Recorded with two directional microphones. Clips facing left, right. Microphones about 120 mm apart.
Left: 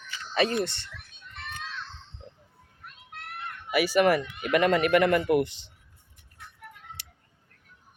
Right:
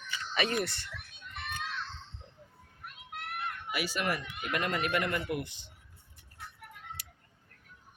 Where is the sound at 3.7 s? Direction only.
75° left (ahead or behind).